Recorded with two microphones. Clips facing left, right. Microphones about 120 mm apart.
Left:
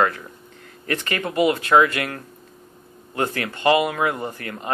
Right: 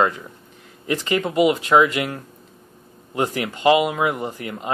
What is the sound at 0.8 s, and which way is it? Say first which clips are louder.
Speech: right 4 dB; 20° right (ahead or behind).